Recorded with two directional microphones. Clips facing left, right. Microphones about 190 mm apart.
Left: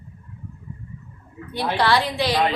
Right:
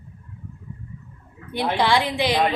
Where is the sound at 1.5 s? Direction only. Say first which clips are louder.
Even; 20° right (ahead or behind).